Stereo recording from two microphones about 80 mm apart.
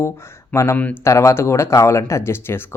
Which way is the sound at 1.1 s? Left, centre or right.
Left.